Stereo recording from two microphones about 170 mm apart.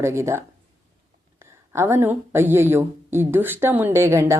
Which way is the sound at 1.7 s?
15° right (ahead or behind).